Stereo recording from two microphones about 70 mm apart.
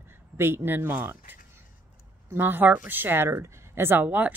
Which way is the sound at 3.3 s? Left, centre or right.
Right.